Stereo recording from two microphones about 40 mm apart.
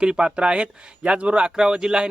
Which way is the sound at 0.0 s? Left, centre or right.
Right.